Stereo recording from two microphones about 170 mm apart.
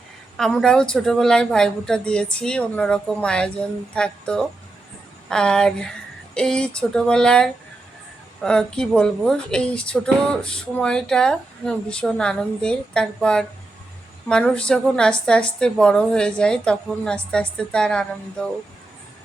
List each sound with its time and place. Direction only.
0.3 s a woman's voice: centre (ahead or behind)